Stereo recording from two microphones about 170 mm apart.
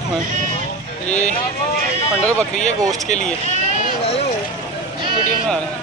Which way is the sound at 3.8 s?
35° left (ahead or behind).